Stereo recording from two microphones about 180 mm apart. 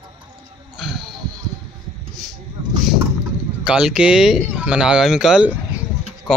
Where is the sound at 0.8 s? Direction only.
Centre (ahead or behind).